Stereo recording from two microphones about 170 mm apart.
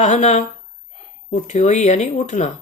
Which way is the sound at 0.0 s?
45° left (ahead or behind).